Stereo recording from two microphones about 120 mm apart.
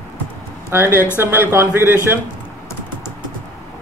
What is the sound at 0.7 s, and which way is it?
Speech, 20° right (ahead or behind).